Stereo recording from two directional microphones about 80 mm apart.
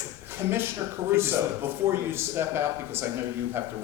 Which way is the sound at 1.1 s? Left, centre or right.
Right.